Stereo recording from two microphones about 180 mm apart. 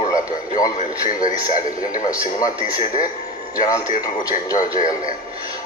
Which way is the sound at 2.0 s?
20° left (ahead or behind).